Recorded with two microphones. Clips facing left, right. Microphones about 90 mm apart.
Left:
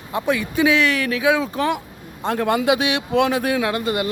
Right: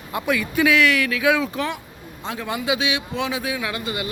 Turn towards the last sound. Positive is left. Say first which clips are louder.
# left 6 dB
turn(degrees=50)  # may be behind; listen again after turning